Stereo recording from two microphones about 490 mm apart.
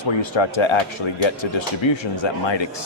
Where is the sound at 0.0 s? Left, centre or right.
Left.